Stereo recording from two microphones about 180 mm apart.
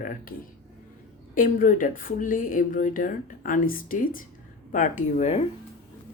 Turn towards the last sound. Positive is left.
turn(degrees=40)  # may be behind; listen again after turning